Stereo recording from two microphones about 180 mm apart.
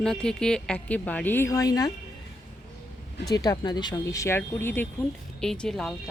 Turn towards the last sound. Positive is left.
turn(degrees=5)  # may be behind; listen again after turning